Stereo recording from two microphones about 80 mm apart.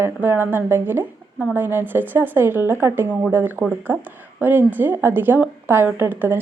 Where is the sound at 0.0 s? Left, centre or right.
Right.